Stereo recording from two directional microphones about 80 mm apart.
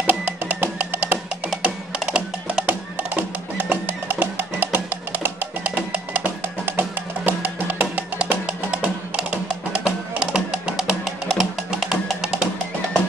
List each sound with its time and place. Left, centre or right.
0.0 s music: centre
1.5 s music: centre